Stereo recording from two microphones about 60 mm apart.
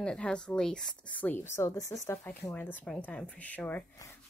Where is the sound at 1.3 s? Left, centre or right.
Left.